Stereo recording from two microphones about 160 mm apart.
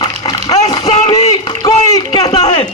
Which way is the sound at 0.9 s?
40° left (ahead or behind).